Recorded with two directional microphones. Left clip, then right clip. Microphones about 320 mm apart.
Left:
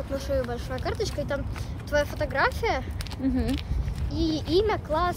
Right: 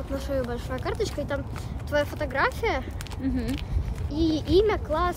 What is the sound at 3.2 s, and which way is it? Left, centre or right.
Speech, centre.